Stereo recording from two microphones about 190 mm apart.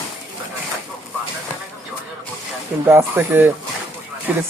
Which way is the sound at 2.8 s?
10° right (ahead or behind).